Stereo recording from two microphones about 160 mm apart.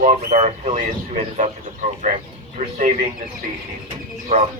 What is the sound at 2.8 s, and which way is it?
Speech, 55° right (ahead or behind).